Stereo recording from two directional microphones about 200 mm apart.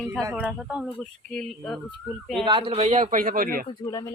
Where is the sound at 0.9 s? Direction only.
5° left (ahead or behind).